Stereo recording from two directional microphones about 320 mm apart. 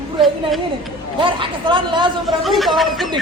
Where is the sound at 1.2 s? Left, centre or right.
Centre.